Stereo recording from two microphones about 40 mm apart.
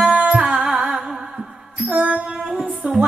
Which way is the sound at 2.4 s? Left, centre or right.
Centre.